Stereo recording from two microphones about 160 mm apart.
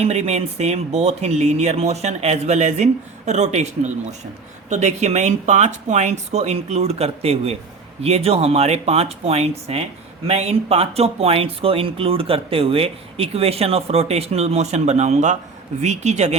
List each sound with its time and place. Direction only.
0.0 s speech: 40° right (ahead or behind)